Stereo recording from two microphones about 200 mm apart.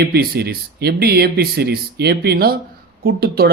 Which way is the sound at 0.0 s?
55° right (ahead or behind).